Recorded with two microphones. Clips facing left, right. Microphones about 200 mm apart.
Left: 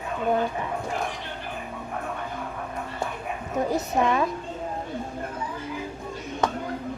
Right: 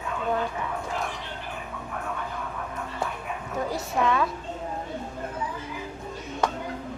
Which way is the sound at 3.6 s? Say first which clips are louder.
Left 2 dB; 20° left (ahead or behind).